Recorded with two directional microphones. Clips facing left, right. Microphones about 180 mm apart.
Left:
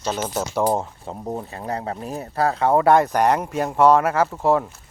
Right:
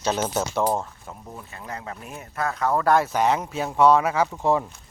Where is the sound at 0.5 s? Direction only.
15° left (ahead or behind).